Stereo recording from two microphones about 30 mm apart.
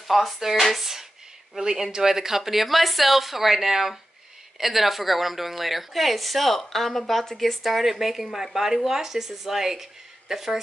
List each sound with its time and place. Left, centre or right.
0.1 s a woman's voice: centre
1.6 s a woman's voice: right